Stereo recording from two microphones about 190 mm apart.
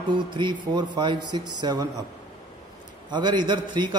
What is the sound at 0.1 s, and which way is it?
A man's voice, 25° right (ahead or behind).